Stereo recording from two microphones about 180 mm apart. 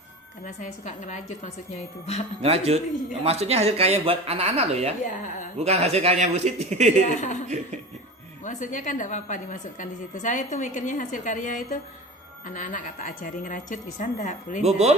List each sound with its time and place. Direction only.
0.4 s a woman's voice: 40° left (ahead or behind)
2.4 s speech: 35° right (ahead or behind)
7.1 s a woman's voice: 45° left (ahead or behind)
8.4 s a woman's voice: 45° left (ahead or behind)
14.6 s speech: 35° right (ahead or behind)